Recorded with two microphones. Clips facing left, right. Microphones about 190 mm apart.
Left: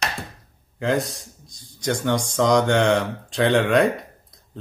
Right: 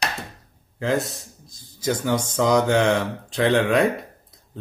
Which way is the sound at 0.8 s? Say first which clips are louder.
Left 1 dB; centre (ahead or behind).